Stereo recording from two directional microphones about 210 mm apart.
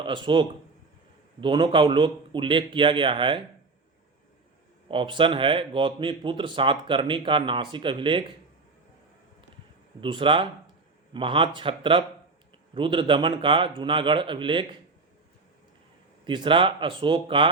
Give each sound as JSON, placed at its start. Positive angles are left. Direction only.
{"t": 0.0, "sound": "speech", "side_deg": -25}
{"t": 4.9, "sound": "speech", "side_deg": -25}
{"t": 10.0, "sound": "speech", "side_deg": -25}
{"t": 16.2, "sound": "speech", "side_deg": -25}